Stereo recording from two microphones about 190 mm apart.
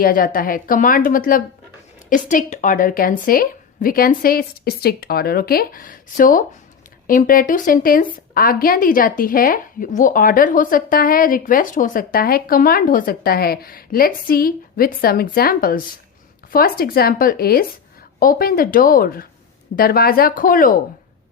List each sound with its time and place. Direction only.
0.0 s a woman's voice: 50° left (ahead or behind)